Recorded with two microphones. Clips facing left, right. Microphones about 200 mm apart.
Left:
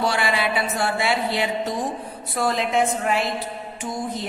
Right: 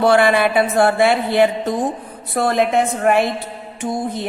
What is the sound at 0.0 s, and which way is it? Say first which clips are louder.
A woman's voice: right 9 dB; 55° right (ahead or behind).